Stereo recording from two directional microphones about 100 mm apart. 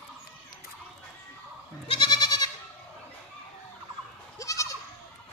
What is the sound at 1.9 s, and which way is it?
Goat, 50° left (ahead or behind).